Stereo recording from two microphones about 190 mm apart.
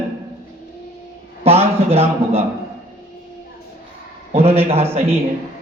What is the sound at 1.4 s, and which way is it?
A man's voice, 30° right (ahead or behind).